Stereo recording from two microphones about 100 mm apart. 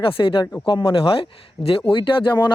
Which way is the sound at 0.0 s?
60° left (ahead or behind).